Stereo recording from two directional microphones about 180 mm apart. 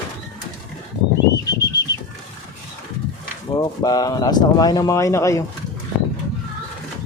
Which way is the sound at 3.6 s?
20° left (ahead or behind).